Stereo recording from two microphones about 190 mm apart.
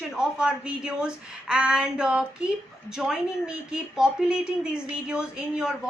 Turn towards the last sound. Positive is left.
turn(degrees=-5)  # may be behind; listen again after turning